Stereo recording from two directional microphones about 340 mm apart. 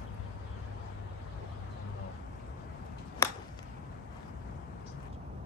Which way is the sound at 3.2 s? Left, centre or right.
Centre.